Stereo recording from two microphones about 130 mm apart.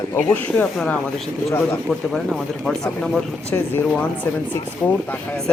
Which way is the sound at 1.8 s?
Centre (ahead or behind).